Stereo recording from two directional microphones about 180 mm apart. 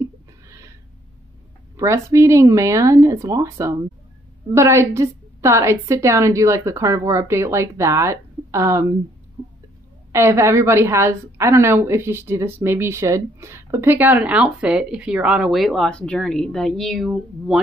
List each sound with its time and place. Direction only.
1.8 s a woman's voice: 15° right (ahead or behind)
10.1 s a woman's voice: 15° right (ahead or behind)